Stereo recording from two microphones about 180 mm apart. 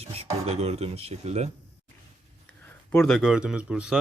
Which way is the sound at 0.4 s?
35° right (ahead or behind).